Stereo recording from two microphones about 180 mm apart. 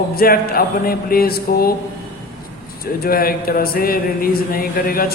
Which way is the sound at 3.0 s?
55° left (ahead or behind).